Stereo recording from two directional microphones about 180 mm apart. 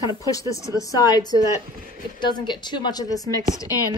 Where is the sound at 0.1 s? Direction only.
20° left (ahead or behind).